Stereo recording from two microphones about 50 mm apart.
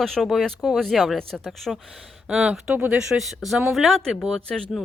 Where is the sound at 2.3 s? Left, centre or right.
Right.